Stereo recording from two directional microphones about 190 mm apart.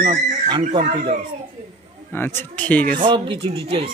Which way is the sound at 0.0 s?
35° right (ahead or behind).